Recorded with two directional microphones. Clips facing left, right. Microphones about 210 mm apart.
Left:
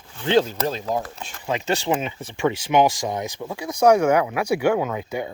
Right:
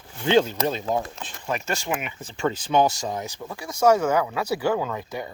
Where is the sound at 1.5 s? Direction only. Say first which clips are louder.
Left 5 dB; 20° left (ahead or behind).